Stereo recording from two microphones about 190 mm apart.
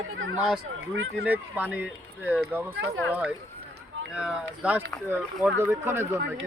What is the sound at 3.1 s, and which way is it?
Speech, 5° right (ahead or behind).